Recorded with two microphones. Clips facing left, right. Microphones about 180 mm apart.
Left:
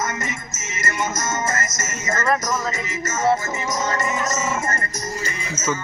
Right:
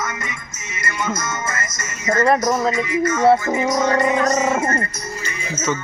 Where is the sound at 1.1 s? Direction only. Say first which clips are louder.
Left 1 dB; 45° left (ahead or behind).